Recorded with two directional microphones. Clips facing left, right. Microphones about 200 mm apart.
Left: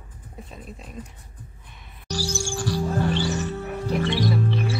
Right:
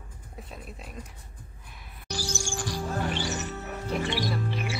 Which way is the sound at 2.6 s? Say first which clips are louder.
Left 7 dB; 15° right (ahead or behind).